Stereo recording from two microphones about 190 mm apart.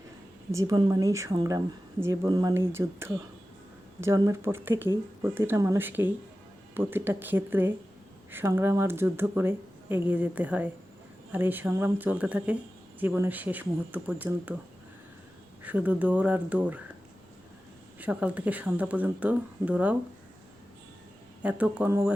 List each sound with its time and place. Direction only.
0.5 s speech: 20° right (ahead or behind)
15.6 s speech: 10° right (ahead or behind)
18.0 s speech: 5° right (ahead or behind)
21.4 s speech: 5° right (ahead or behind)